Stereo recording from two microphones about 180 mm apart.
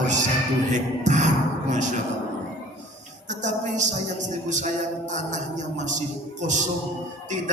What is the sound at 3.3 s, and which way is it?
A woman's voice, 45° right (ahead or behind).